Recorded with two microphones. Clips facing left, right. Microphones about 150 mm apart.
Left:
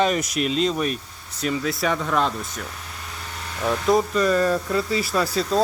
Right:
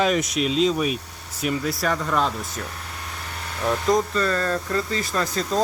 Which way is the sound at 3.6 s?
5° left (ahead or behind).